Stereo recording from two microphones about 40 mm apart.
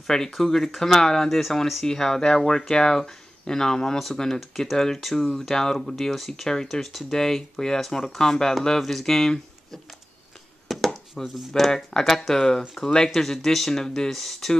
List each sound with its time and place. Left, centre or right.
0.0 s speech: centre
6.5 s speech: centre
6.8 s speech: centre
10.7 s a sound: centre
11.7 s speech: centre
13.2 s speech: centre